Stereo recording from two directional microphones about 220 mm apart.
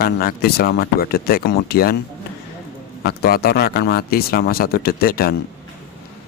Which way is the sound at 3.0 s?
45° left (ahead or behind).